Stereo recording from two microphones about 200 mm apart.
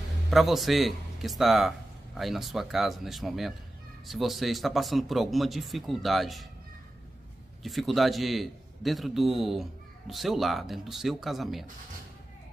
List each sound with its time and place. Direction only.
0.3 s a man's voice: centre (ahead or behind)
7.6 s a man's voice: centre (ahead or behind)